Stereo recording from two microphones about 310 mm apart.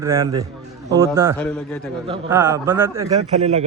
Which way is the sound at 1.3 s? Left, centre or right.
Centre.